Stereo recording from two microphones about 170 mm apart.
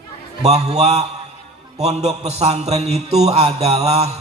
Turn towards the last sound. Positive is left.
turn(degrees=-40)  # may be behind; listen again after turning